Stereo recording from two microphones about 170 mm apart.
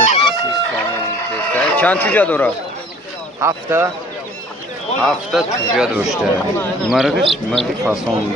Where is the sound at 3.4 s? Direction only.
15° right (ahead or behind).